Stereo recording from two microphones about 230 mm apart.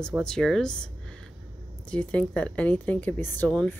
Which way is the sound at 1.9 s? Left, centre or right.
Centre.